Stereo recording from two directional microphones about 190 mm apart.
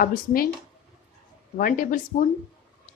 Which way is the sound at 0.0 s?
50° left (ahead or behind).